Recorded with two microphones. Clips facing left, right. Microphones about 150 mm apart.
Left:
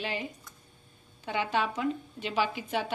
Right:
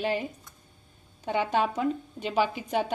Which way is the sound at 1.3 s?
45° right (ahead or behind).